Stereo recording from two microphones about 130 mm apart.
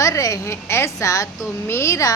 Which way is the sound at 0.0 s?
25° left (ahead or behind).